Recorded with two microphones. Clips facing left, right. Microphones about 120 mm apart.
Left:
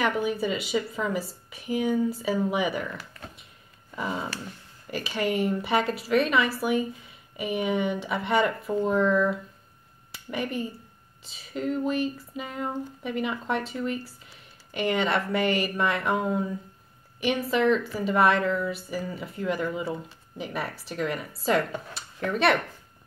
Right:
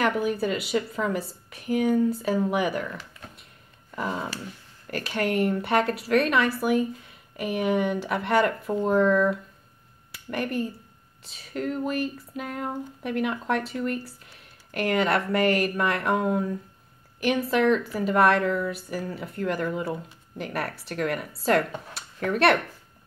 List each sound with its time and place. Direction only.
0.0 s a woman's voice: centre (ahead or behind)